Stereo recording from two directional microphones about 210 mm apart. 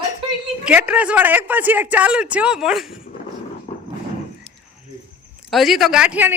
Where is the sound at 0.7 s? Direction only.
5° right (ahead or behind).